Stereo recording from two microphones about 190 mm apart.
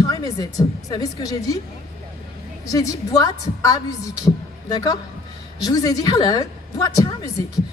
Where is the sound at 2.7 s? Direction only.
20° left (ahead or behind).